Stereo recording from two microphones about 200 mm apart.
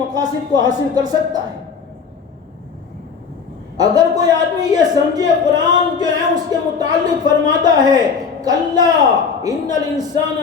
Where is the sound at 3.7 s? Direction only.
20° right (ahead or behind).